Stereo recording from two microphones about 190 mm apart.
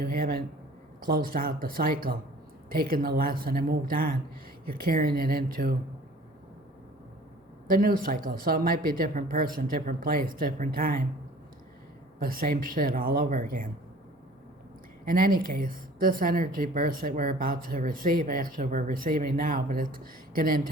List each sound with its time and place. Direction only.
0.0 s speech: 50° right (ahead or behind)
7.7 s speech: 50° right (ahead or behind)
12.2 s speech: 50° right (ahead or behind)
15.0 s speech: 50° right (ahead or behind)